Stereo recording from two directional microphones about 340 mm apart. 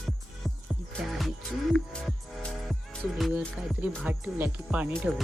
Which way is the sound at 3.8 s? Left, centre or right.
Centre.